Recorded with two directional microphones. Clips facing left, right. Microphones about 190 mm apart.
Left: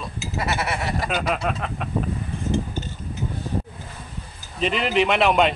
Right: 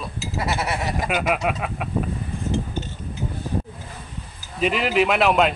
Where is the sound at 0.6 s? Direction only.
15° right (ahead or behind).